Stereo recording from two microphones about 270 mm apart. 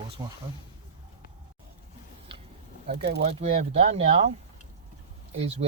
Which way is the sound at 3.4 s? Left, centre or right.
Right.